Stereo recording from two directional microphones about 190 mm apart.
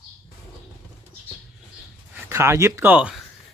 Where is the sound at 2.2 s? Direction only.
15° right (ahead or behind).